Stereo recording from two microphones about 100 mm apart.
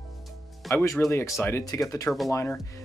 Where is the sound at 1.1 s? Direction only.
30° left (ahead or behind).